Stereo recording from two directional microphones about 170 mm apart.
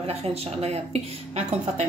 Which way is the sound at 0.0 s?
35° right (ahead or behind).